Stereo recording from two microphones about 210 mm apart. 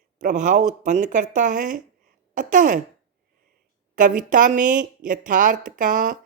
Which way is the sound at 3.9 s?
40° right (ahead or behind).